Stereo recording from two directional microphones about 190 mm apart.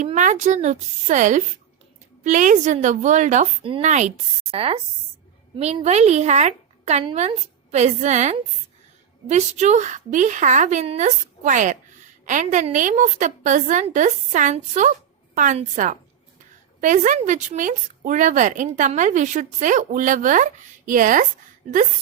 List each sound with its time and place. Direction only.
0.0 s a woman's voice: 40° right (ahead or behind)